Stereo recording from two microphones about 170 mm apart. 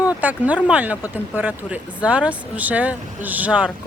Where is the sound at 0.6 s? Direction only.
5° right (ahead or behind).